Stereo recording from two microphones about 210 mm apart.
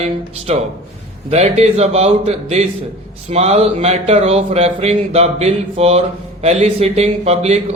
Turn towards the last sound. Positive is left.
turn(degrees=-30)  # may be behind; listen again after turning